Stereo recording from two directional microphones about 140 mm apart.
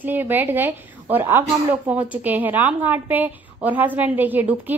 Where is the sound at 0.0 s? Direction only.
15° right (ahead or behind).